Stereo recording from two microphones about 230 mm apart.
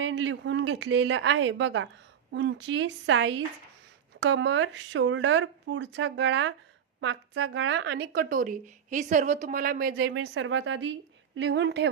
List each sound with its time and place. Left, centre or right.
0.0 s speech: right
10.1 s speech: right